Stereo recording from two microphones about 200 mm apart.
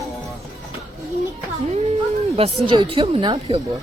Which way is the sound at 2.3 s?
30° right (ahead or behind).